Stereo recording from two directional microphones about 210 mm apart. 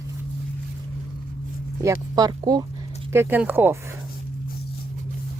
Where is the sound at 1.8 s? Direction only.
15° right (ahead or behind).